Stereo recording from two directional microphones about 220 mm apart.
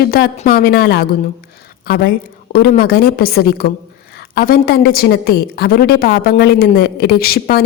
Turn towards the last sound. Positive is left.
turn(degrees=45)  # may be behind; listen again after turning